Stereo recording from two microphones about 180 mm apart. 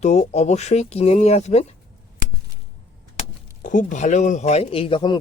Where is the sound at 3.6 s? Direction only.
45° left (ahead or behind); by 5.2 s 25° left (ahead or behind).